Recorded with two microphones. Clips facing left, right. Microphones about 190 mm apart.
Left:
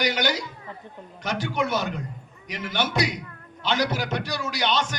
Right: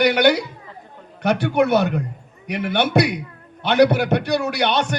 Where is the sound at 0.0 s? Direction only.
60° right (ahead or behind).